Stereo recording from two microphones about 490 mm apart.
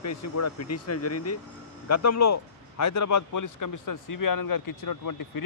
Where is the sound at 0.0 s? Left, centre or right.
Left.